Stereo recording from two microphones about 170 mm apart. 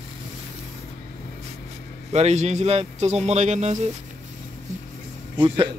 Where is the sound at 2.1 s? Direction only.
40° right (ahead or behind).